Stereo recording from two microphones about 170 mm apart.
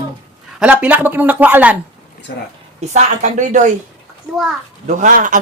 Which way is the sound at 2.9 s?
45° right (ahead or behind).